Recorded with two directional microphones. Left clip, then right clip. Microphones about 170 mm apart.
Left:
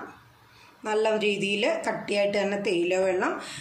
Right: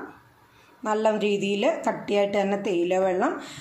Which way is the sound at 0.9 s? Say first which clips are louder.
Right 1 dB; 50° right (ahead or behind).